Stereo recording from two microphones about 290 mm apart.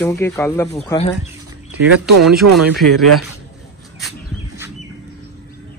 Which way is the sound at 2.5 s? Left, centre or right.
Centre.